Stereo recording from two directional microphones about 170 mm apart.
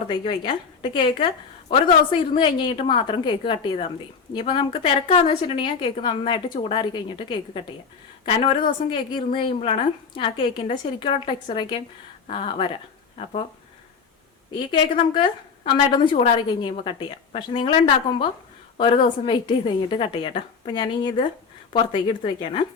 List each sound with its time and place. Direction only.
0.1 s a woman's voice: 30° left (ahead or behind)
2.3 s a woman's voice: 30° left (ahead or behind)
14.7 s a woman's voice: 30° left (ahead or behind)